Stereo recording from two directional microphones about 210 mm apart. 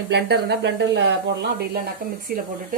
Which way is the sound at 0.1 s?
55° right (ahead or behind).